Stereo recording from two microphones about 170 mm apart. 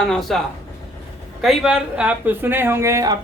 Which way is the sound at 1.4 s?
5° right (ahead or behind).